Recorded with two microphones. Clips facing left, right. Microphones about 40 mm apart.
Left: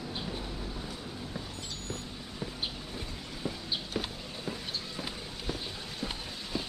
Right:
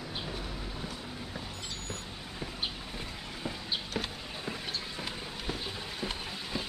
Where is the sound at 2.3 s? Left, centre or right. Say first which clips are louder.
Even; centre.